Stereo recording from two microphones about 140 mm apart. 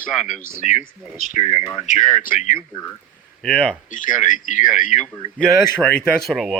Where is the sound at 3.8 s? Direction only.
65° left (ahead or behind).